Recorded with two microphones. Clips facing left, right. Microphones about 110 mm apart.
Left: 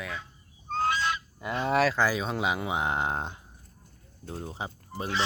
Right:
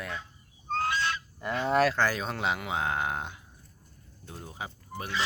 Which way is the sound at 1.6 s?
5° left (ahead or behind).